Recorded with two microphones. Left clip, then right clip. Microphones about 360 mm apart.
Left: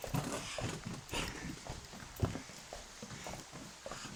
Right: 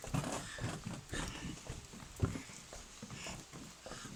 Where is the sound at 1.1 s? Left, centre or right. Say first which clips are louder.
Left 4 dB; centre.